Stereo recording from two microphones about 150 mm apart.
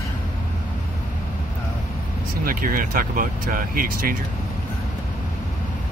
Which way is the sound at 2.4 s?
70° right (ahead or behind).